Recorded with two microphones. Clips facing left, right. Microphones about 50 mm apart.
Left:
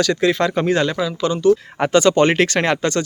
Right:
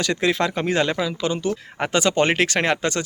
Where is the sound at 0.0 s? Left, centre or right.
Right.